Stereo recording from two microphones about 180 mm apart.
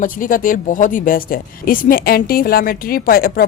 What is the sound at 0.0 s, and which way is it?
Speech, 50° left (ahead or behind).